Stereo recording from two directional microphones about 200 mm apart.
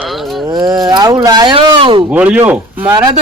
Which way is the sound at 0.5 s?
15° right (ahead or behind).